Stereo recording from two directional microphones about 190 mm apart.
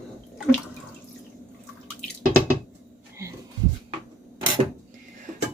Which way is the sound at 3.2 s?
15° right (ahead or behind).